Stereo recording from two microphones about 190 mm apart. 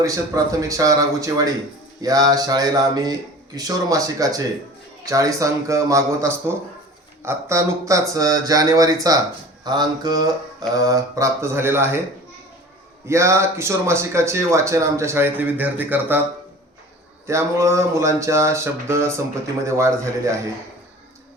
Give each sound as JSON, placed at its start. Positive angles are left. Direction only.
{"t": 0.0, "sound": "speech", "side_deg": -20}
{"t": 13.1, "sound": "speech", "side_deg": -15}
{"t": 17.2, "sound": "speech", "side_deg": -15}